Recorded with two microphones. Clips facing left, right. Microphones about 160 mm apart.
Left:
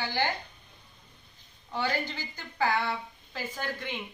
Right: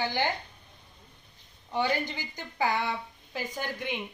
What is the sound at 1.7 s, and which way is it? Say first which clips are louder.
A woman's voice: right 2 dB; 15° right (ahead or behind).